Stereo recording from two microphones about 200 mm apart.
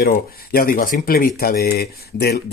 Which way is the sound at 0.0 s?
50° left (ahead or behind).